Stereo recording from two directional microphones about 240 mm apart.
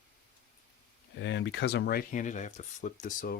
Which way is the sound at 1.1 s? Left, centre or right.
Left.